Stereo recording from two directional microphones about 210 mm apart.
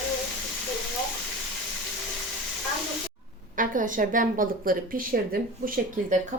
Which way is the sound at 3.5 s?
40° right (ahead or behind).